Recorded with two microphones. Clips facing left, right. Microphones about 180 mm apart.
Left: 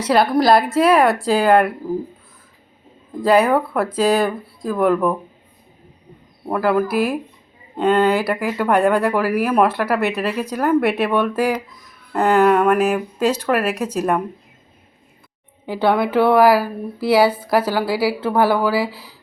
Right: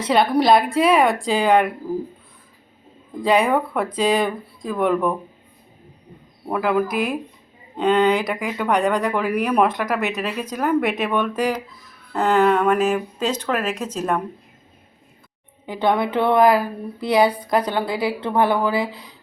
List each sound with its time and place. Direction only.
0.0 s speech: centre (ahead or behind)
3.2 s speech: 5° left (ahead or behind)
6.5 s speech: centre (ahead or behind)
16.0 s speech: 5° left (ahead or behind)